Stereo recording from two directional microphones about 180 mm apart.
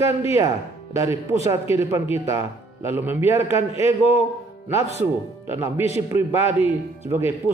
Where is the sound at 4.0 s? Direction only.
35° left (ahead or behind).